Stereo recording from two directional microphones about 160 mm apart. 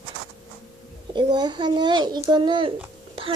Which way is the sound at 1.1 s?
25° right (ahead or behind).